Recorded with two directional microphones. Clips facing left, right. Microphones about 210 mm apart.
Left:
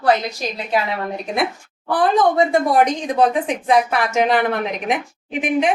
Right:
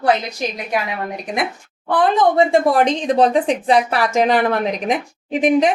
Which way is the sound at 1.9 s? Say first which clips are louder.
Right 1 dB; 25° right (ahead or behind).